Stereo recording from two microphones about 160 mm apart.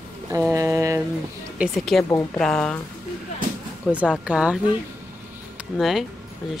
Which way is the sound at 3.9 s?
5° right (ahead or behind).